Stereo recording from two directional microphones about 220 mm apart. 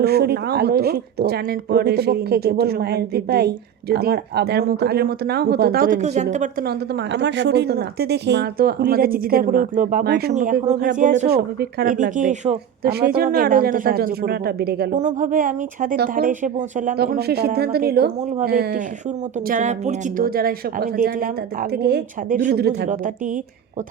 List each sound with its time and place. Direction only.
0.0 s speech: 45° right (ahead or behind)
10.3 s speech: 35° right (ahead or behind)
11.3 s speech: 45° right (ahead or behind)
12.9 s speech: 45° right (ahead or behind)
14.9 s speech: 35° right (ahead or behind)
19.5 s speech: 35° right (ahead or behind)